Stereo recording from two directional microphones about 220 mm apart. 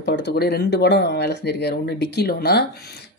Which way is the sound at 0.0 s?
50° left (ahead or behind).